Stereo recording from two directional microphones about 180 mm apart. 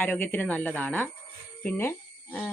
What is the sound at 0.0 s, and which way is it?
Speech, 10° left (ahead or behind).